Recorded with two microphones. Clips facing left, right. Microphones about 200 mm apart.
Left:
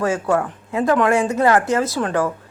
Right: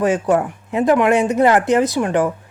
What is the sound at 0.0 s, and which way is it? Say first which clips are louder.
A woman's voice: right 3 dB; 20° right (ahead or behind).